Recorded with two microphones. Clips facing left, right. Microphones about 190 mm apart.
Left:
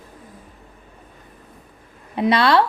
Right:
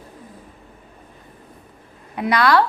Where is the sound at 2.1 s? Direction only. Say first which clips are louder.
Left 1 dB; 25° left (ahead or behind).